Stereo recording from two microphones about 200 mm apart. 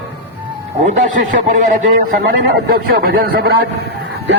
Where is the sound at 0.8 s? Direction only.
40° right (ahead or behind).